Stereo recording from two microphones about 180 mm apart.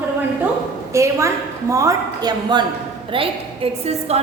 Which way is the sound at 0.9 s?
15° right (ahead or behind).